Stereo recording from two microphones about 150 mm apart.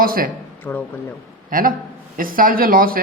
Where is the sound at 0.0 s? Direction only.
75° right (ahead or behind).